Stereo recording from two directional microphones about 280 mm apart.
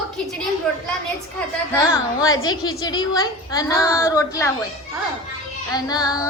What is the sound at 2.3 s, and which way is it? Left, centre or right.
Speech, left.